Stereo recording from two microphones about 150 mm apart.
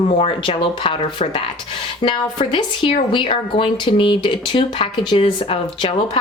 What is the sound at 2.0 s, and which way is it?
A woman's voice, 35° left (ahead or behind).